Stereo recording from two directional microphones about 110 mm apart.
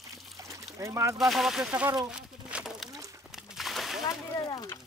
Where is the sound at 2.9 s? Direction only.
30° right (ahead or behind).